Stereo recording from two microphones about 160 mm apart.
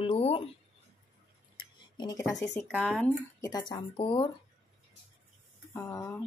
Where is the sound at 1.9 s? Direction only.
25° left (ahead or behind).